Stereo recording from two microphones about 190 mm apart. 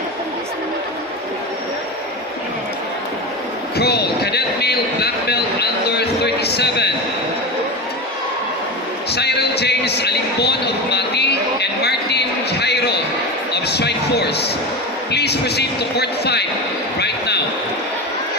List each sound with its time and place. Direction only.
3.8 s vehicle: 60° left (ahead or behind)
9.1 s speech: 60° left (ahead or behind)
17.0 s a sound: 60° left (ahead or behind)